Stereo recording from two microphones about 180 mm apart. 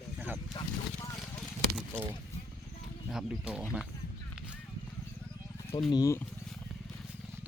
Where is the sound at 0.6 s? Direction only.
25° left (ahead or behind).